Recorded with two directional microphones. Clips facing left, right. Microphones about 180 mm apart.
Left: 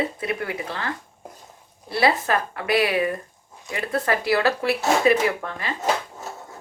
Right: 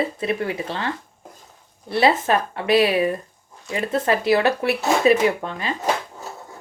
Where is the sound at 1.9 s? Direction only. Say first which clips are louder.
Right 3 dB; 25° right (ahead or behind).